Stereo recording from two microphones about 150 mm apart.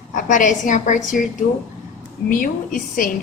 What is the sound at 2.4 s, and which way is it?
Speech, 65° left (ahead or behind).